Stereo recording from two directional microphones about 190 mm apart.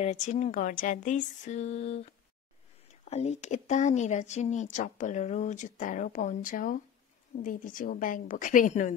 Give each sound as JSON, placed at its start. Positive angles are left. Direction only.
{"t": 0.0, "sound": "speech", "side_deg": 35}
{"t": 3.1, "sound": "a woman's voice", "side_deg": 35}